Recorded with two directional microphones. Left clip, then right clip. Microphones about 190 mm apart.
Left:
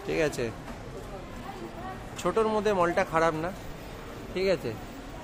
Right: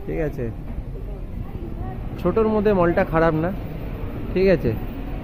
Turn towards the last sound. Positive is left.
turn(degrees=10)  # may be behind; listen again after turning